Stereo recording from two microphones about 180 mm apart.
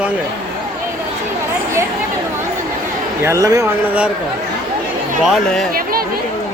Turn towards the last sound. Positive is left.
turn(degrees=0)  # may be behind; listen again after turning